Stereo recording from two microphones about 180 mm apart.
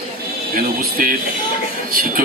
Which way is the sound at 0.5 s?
55° right (ahead or behind).